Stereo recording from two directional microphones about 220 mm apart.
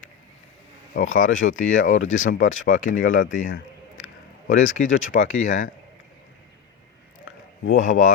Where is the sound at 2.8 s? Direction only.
35° left (ahead or behind).